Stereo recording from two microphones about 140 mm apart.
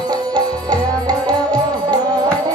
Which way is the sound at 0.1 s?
30° right (ahead or behind).